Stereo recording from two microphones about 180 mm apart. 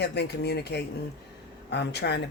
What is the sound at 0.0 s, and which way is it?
Speech, 65° left (ahead or behind).